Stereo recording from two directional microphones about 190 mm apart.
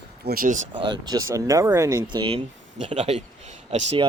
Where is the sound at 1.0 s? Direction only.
20° right (ahead or behind).